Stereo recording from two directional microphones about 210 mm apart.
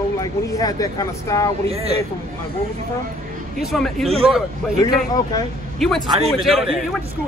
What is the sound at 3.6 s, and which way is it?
Speech, centre (ahead or behind).